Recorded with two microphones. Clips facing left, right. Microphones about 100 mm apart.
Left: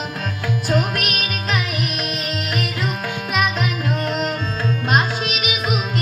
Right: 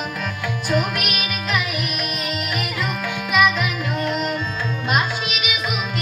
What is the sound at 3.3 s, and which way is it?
Music, 45° left (ahead or behind).